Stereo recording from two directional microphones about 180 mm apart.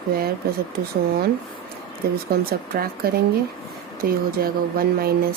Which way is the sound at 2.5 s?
55° right (ahead or behind).